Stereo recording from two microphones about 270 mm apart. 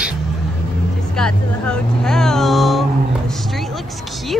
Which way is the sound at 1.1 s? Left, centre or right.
Centre.